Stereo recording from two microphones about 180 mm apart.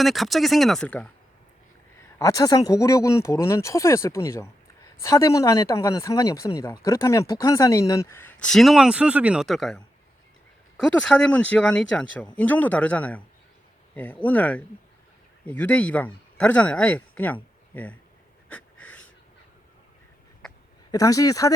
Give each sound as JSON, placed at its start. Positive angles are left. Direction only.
{"t": 0.0, "sound": "speech", "side_deg": 0}
{"t": 2.1, "sound": "speech", "side_deg": 20}
{"t": 18.4, "sound": "wheeze", "side_deg": 10}
{"t": 20.9, "sound": "speech", "side_deg": 20}